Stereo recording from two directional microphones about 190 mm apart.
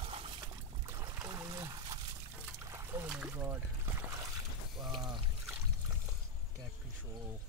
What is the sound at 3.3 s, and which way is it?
Trickle, 10° right (ahead or behind).